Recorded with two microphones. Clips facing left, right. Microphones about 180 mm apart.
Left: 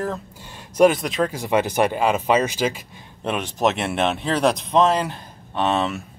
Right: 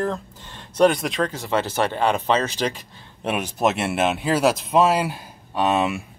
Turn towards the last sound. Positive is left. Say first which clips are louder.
# right 1 dB
turn(degrees=-10)  # may be behind; listen again after turning